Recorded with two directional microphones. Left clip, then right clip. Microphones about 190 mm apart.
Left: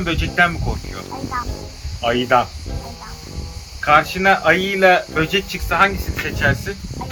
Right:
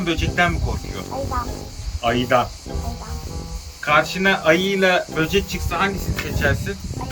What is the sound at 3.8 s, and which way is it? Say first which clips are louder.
Speech: left 3 dB; 5° right (ahead or behind).